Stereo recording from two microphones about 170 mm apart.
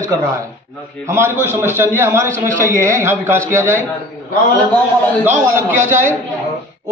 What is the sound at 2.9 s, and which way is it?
Speech, 15° right (ahead or behind).